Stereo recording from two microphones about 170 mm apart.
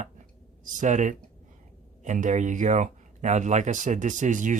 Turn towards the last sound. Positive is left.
turn(degrees=-50)  # may be behind; listen again after turning